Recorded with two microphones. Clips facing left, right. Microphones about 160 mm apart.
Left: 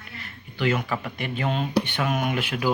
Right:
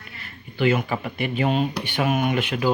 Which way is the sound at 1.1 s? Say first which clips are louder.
Right 7 dB; 10° right (ahead or behind).